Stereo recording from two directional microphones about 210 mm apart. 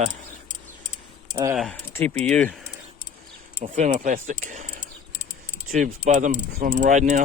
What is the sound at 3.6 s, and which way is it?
Speech, 35° right (ahead or behind).